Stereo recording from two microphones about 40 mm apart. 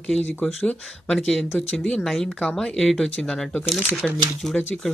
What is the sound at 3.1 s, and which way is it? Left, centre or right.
Speech, left.